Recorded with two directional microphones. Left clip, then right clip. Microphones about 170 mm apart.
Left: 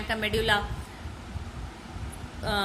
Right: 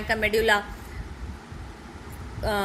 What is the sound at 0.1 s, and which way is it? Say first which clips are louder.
Speech: right 4 dB; 20° right (ahead or behind).